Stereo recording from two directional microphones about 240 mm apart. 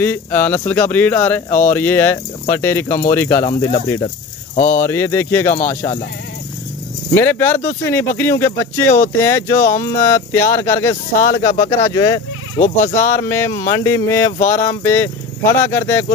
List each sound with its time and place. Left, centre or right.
0.0 s speech: centre
4.6 s speech: left
4.8 s speech: centre
7.2 s speech: centre